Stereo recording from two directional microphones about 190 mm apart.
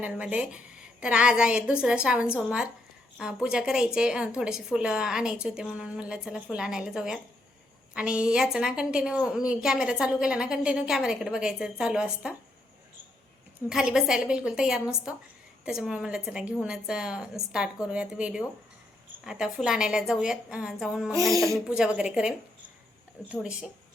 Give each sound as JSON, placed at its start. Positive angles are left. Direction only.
{"t": 0.0, "sound": "a woman's voice", "side_deg": -5}
{"t": 13.7, "sound": "a woman's voice", "side_deg": -5}
{"t": 21.3, "sound": "speech", "side_deg": -15}
{"t": 21.7, "sound": "a woman's voice", "side_deg": -5}